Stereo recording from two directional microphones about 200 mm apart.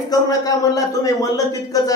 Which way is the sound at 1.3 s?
15° left (ahead or behind).